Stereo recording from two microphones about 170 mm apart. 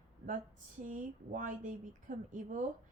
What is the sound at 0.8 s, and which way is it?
A woman's voice, 50° right (ahead or behind).